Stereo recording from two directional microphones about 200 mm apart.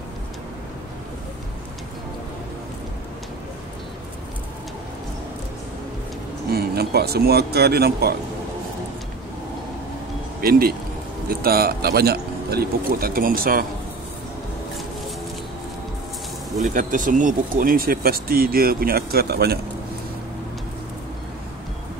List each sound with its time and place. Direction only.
6.5 s speech: 50° right (ahead or behind)
11.2 s speech: 50° right (ahead or behind)
16.5 s speech: 40° right (ahead or behind)